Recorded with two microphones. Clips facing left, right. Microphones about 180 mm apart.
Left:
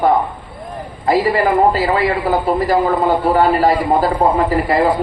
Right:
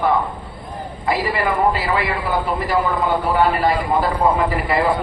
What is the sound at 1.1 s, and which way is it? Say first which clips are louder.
A man's voice: left 6 dB; 35° left (ahead or behind).